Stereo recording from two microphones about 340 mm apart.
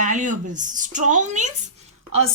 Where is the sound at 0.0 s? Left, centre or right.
Right.